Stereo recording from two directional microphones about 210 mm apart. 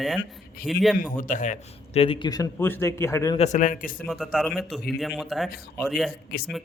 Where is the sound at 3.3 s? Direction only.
35° left (ahead or behind).